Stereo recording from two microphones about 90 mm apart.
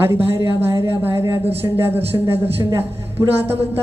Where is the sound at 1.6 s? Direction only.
25° right (ahead or behind).